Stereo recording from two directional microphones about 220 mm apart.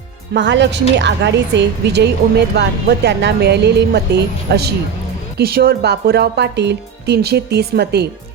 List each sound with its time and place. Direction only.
0.3 s speech: 55° right (ahead or behind)